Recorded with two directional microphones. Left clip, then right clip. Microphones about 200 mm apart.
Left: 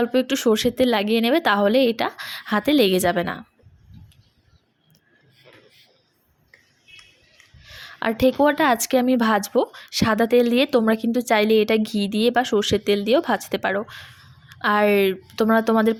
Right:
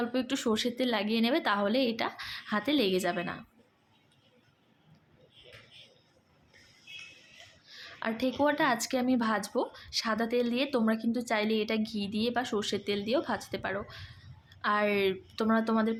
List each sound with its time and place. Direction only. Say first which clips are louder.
0.0 s a woman's voice: left 12 dB; 35° left (ahead or behind)
7.6 s a woman's voice: left 11 dB; 40° left (ahead or behind)